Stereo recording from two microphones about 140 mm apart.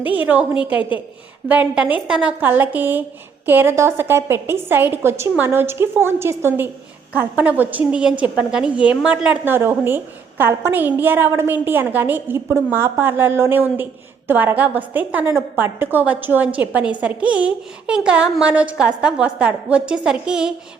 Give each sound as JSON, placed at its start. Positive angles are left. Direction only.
{"t": 0.0, "sound": "a woman's voice", "side_deg": -10}